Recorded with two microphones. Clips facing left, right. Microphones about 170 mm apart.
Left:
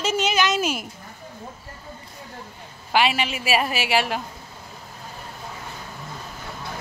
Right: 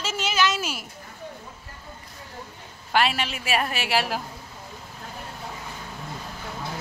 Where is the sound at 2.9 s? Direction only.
Centre (ahead or behind).